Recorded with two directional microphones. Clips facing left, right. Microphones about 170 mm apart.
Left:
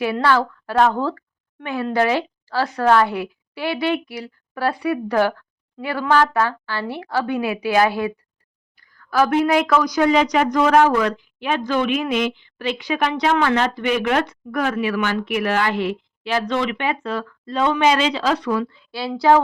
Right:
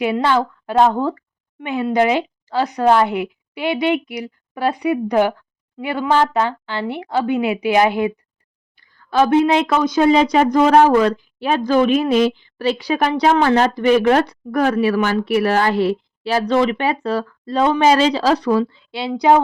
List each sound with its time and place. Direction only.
0.0 s a woman's voice: 20° right (ahead or behind)